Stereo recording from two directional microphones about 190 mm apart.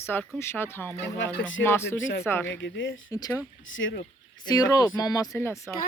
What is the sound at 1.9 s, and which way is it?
Speech, 85° left.